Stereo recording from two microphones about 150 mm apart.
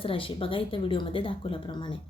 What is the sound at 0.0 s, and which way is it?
A woman's voice, 35° left (ahead or behind).